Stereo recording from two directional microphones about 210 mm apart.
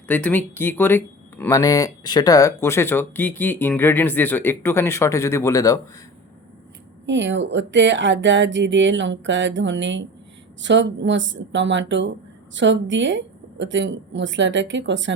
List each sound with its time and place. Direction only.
0.1 s speech: 5° left (ahead or behind)
7.0 s speech: 60° right (ahead or behind)